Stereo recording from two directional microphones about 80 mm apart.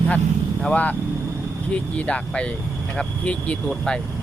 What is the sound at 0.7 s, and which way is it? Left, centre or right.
Speech, centre.